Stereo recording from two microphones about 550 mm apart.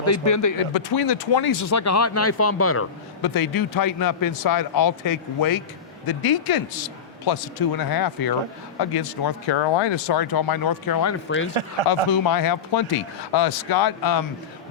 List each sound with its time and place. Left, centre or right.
0.0 s speech: left
0.9 s speech: left
1.5 s speech: left
3.2 s speech: left
11.6 s speech: right
12.1 s speech: left